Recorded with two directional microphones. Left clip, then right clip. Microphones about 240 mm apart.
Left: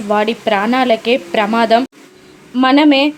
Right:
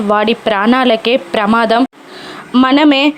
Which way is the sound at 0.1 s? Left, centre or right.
Centre.